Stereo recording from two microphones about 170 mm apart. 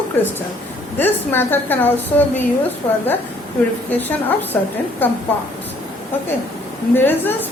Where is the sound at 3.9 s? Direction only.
10° left (ahead or behind).